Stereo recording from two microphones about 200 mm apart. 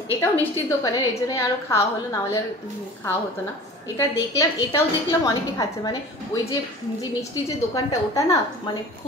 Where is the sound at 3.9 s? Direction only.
15° left (ahead or behind).